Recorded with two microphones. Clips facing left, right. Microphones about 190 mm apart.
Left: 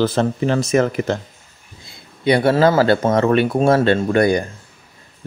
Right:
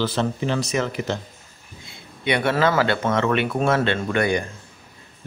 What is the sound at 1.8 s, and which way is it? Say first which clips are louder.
Speech: left 7 dB; 35° left (ahead or behind).